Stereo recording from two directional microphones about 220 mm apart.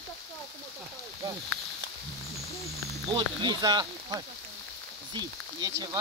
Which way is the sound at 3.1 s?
20° right (ahead or behind).